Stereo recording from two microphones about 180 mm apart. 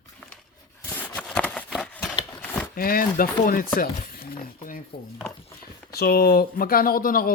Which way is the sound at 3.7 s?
55° left (ahead or behind).